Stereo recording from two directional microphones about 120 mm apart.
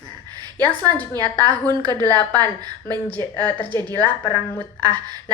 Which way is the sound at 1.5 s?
15° left (ahead or behind).